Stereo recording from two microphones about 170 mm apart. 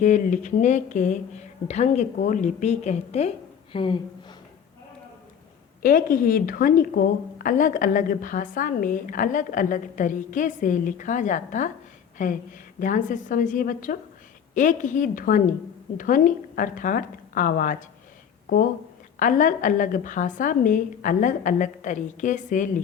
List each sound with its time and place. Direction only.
0.0 s a woman's voice: 45° left (ahead or behind)
5.8 s a woman's voice: 55° left (ahead or behind)